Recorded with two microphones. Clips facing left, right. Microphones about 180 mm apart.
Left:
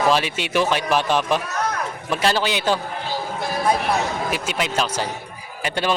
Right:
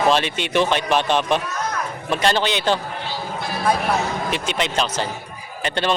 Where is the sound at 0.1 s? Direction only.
5° left (ahead or behind).